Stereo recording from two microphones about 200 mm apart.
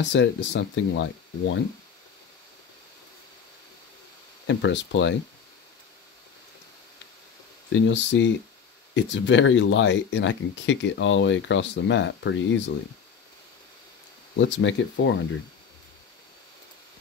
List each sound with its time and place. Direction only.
0.1 s speech: 65° left (ahead or behind)
4.5 s speech: 65° left (ahead or behind)
7.7 s speech: 65° left (ahead or behind)
14.4 s speech: 70° left (ahead or behind)